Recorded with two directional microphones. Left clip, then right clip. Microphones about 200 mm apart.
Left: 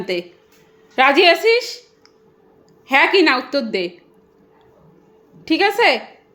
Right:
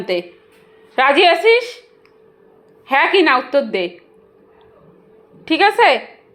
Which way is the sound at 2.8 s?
30° left (ahead or behind).